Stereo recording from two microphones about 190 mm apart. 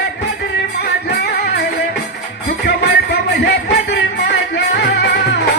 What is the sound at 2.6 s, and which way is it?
Music, 60° left (ahead or behind).